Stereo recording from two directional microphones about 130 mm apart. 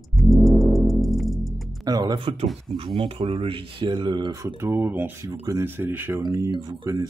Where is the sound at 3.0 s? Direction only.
40° right (ahead or behind).